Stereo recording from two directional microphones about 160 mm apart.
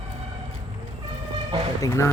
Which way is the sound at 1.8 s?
15° left (ahead or behind).